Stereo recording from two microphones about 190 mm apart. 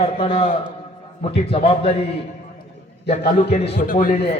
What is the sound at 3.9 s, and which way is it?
Speech, 45° left (ahead or behind).